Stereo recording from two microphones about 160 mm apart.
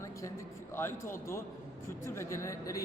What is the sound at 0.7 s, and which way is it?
A man's voice, 15° left (ahead or behind).